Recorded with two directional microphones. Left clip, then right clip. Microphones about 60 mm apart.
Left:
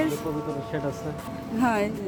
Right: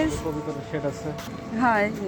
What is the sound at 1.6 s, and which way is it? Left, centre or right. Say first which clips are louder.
Speech: right 3 dB; left.